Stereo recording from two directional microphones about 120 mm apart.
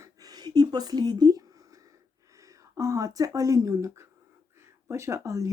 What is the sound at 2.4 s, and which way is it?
Speech, 25° right (ahead or behind).